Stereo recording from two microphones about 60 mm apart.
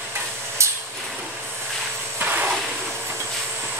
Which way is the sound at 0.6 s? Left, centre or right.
Right.